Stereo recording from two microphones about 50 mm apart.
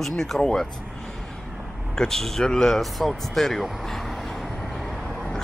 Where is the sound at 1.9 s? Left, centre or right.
Centre.